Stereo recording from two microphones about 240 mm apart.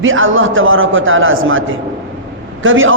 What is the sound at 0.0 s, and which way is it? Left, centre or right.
A man's voice, right.